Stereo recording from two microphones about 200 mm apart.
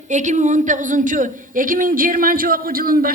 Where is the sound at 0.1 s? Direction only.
35° right (ahead or behind).